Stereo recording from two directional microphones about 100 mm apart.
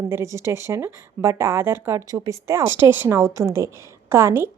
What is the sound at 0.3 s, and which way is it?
Speech, 30° right (ahead or behind).